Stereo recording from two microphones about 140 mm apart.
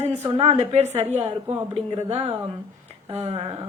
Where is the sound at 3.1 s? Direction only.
50° right (ahead or behind).